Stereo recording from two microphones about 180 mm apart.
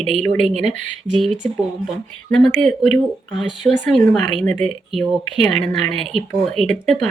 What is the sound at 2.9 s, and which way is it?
Speech, 5° left (ahead or behind).